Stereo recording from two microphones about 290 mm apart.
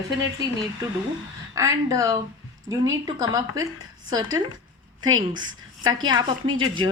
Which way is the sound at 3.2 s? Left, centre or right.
Centre.